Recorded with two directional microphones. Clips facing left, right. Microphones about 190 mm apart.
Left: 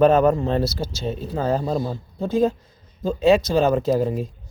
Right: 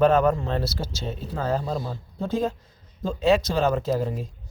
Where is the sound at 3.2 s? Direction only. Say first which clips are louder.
Left 4 dB; 15° left (ahead or behind).